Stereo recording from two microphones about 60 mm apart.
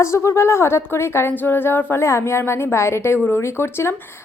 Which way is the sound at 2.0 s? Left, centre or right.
Left.